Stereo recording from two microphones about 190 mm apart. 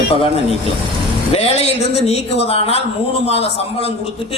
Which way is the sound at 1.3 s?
30° left (ahead or behind).